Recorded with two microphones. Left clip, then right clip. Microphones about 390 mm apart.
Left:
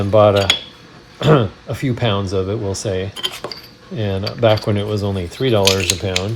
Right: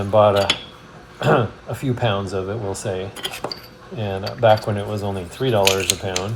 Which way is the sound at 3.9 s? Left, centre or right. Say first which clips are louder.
Left 3 dB; left.